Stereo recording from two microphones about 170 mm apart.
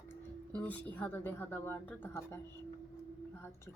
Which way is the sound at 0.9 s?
10° left (ahead or behind).